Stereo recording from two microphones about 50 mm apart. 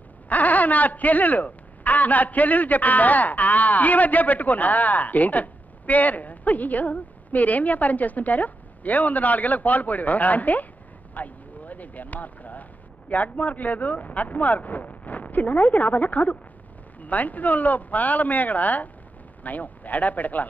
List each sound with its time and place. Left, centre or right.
0.3 s speech: left
11.1 s a sound: left
13.1 s speech: left